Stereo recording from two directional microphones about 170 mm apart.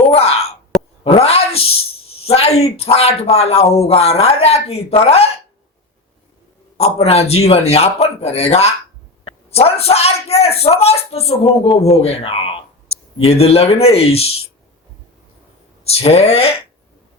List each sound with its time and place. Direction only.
0.1 s plop: 35° left (ahead or behind)
1.0 s speech: 35° left (ahead or behind)
6.7 s speech: 35° left (ahead or behind)
15.8 s speech: 35° left (ahead or behind)